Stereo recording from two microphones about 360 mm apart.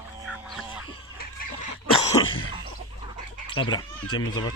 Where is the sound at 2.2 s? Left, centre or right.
Centre.